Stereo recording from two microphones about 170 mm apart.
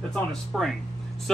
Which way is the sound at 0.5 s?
Centre (ahead or behind).